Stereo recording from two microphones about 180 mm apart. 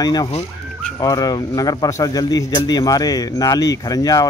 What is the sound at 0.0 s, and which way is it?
Speech, 20° left (ahead or behind).